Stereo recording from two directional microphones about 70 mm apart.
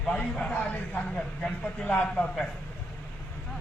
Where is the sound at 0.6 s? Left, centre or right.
Left.